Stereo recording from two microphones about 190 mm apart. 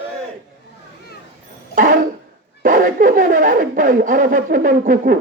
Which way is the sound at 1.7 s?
45° right (ahead or behind).